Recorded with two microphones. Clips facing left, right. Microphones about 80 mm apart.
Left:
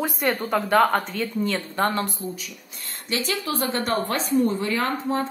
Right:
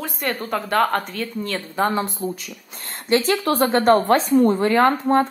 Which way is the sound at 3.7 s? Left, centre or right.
Right.